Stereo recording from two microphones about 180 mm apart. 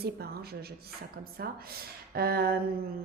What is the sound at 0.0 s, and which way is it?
A woman's voice, 60° right (ahead or behind).